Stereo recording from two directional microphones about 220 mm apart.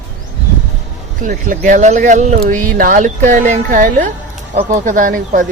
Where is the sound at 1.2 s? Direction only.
35° right (ahead or behind).